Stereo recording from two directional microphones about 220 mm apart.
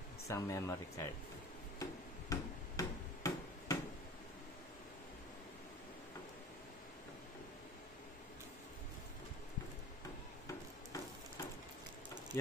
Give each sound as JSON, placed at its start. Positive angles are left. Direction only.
{"t": 0.3, "sound": "speech", "side_deg": 15}
{"t": 1.8, "sound": "tick-tock", "side_deg": 15}